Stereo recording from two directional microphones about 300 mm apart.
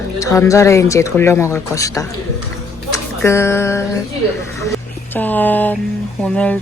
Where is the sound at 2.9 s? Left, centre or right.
Centre.